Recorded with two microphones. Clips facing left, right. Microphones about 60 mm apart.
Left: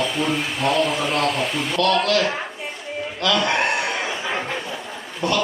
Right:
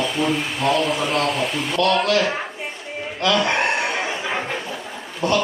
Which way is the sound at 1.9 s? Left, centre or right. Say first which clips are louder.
Even; right.